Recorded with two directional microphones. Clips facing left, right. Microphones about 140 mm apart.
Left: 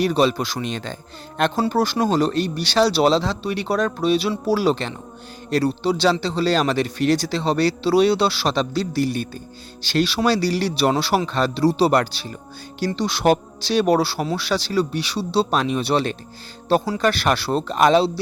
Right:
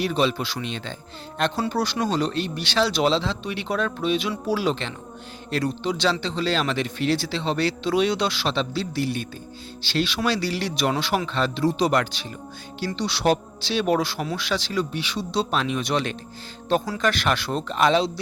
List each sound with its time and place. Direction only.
0.0 s a man's voice: 40° left (ahead or behind)
13.0 s a man's voice: 45° left (ahead or behind)